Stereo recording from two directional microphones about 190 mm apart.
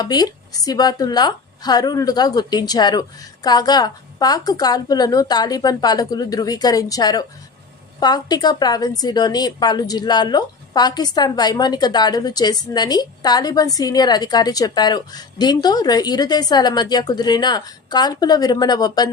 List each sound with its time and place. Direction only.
0.0 s a woman's voice: 20° left (ahead or behind)